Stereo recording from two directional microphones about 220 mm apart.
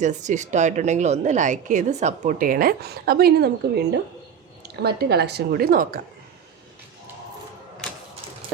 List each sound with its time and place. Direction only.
0.0 s a woman's voice: 35° right (ahead or behind)